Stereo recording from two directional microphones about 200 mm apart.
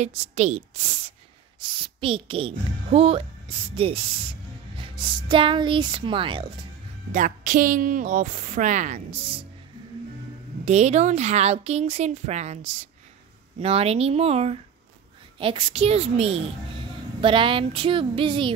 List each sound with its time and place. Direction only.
0.0 s a woman's voice: 35° right (ahead or behind)
7.1 s a woman's voice: 40° right (ahead or behind)
10.6 s a woman's voice: 35° right (ahead or behind)